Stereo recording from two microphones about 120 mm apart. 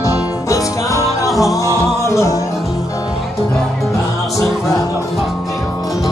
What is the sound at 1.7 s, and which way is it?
Music, 25° left (ahead or behind).